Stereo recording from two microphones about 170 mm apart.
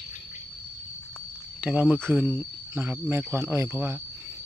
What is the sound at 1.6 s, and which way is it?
Speech, 10° right (ahead or behind).